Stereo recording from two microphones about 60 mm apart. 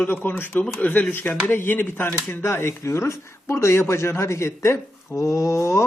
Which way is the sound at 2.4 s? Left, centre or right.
Left.